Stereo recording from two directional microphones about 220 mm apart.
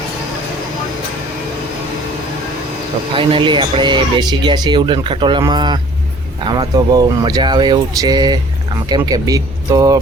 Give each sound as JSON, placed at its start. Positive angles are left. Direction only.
{"t": 3.2, "sound": "speech", "side_deg": -20}